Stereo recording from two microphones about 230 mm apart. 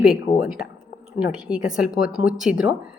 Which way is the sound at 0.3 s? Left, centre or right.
Left.